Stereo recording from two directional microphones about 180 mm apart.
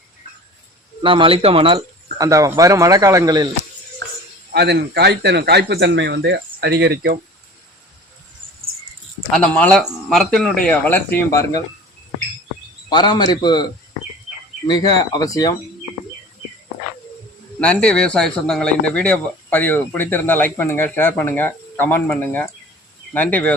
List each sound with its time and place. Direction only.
1.0 s speech: 30° right (ahead or behind)
4.5 s speech: 65° right (ahead or behind)
9.3 s a man's voice: 5° left (ahead or behind)
12.9 s speech: 25° left (ahead or behind)
14.7 s speech: 25° left (ahead or behind)
17.6 s a man's voice: 5° left (ahead or behind)